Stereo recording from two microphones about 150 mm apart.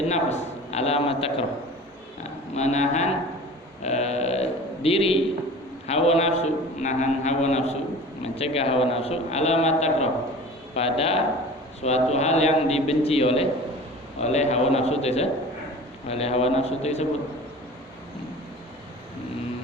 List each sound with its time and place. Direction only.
0.1 s a man's voice: 50° left (ahead or behind)
2.6 s a man's voice: 50° left (ahead or behind)